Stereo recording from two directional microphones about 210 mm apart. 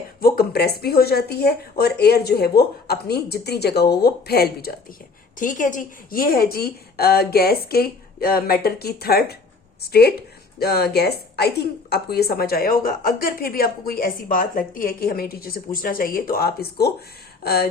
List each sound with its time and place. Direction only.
0.2 s a woman's voice: 45° left (ahead or behind)
10.6 s a woman's voice: 50° left (ahead or behind)